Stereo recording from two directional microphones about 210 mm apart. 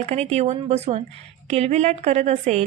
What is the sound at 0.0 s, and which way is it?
A woman's voice, 30° right (ahead or behind).